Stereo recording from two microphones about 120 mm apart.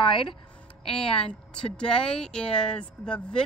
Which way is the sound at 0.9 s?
5° left (ahead or behind).